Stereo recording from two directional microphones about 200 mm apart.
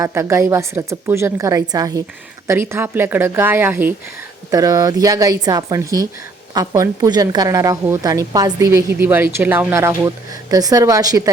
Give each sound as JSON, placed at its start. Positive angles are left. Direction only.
{"t": 0.0, "sound": "a woman's voice", "side_deg": -15}